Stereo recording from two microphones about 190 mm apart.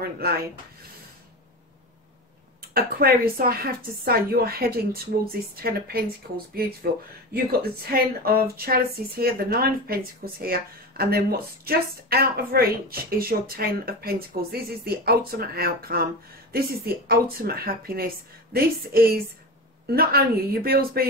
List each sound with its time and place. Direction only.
2.7 s a woman's voice: 55° right (ahead or behind)